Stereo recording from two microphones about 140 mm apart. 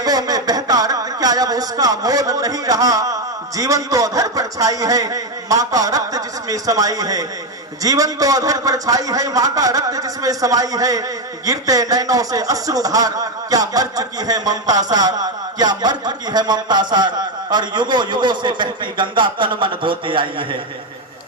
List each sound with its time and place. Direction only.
0.0 s speech: 25° right (ahead or behind)